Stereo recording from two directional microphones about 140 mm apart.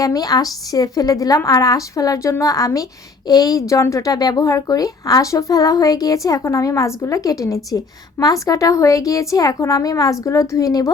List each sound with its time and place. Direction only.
0.0 s a woman's voice: 25° left (ahead or behind)